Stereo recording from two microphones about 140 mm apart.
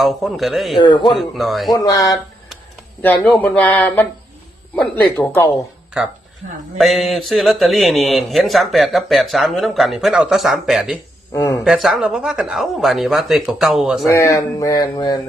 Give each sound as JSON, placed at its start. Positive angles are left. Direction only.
{"t": 0.0, "sound": "a man's voice", "side_deg": 0}
{"t": 0.8, "sound": "a man's voice", "side_deg": 35}
{"t": 1.1, "sound": "a man's voice", "side_deg": 0}
{"t": 1.7, "sound": "speech", "side_deg": 25}
{"t": 3.0, "sound": "speech", "side_deg": 10}
{"t": 6.7, "sound": "a man's voice", "side_deg": 0}
{"t": 11.3, "sound": "speech", "side_deg": 25}
{"t": 11.6, "sound": "a man's voice", "side_deg": 0}
{"t": 14.1, "sound": "speech", "side_deg": 20}